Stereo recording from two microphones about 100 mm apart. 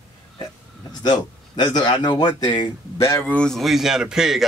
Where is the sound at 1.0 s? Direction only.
45° left (ahead or behind).